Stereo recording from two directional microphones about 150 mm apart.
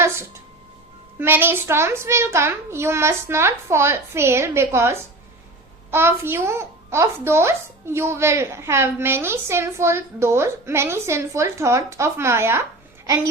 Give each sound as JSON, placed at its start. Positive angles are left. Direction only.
{"t": 1.2, "sound": "a child's voice", "side_deg": -15}